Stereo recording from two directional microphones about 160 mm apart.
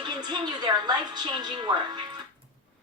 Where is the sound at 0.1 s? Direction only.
25° right (ahead or behind).